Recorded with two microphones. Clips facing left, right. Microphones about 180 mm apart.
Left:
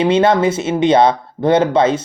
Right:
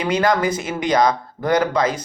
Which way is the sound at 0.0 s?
25° left (ahead or behind).